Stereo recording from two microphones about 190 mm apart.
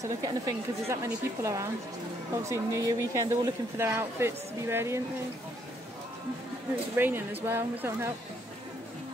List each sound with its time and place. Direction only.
0.0 s speech: 20° right (ahead or behind)
7.0 s speech: 10° right (ahead or behind)